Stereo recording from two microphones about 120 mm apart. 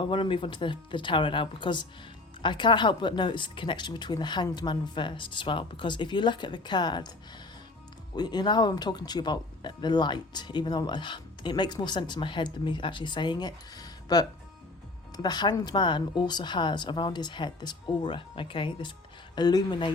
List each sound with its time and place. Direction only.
0.0 s speech: 45° left (ahead or behind)
8.1 s speech: 35° left (ahead or behind)